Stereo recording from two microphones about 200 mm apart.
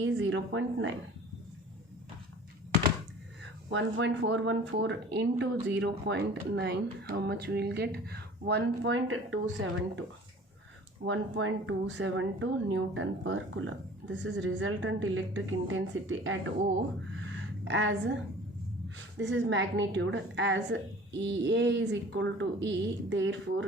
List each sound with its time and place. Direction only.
0.0 s a woman's voice: 65° right (ahead or behind)
3.7 s speech: 65° right (ahead or behind)
11.0 s a woman's voice: 75° right (ahead or behind)
17.7 s speech: 60° right (ahead or behind)